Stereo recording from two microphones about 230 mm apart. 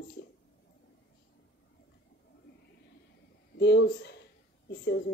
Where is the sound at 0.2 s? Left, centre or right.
Left.